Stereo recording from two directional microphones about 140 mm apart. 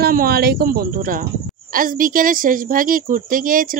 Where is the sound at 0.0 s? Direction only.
90° right.